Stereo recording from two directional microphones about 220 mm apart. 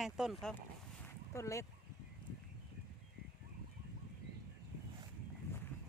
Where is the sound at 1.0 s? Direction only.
15° left (ahead or behind).